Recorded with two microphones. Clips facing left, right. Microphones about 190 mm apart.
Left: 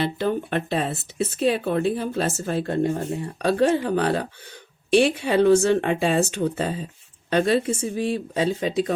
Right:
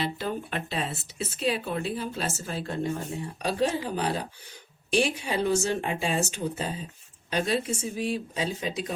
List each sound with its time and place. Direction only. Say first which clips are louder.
0.0 s speech: left 7 dB; 60° left (ahead or behind)